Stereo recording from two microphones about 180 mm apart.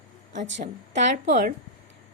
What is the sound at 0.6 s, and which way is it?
Speech, 40° right (ahead or behind).